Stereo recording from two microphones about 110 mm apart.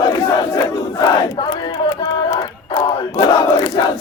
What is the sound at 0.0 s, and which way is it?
Battle cry, 35° left (ahead or behind).